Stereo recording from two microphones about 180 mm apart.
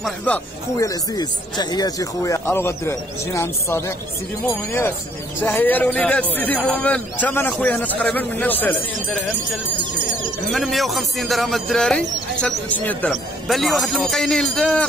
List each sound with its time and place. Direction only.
0.0 s speech: 10° left (ahead or behind)
10.5 s speech: centre (ahead or behind)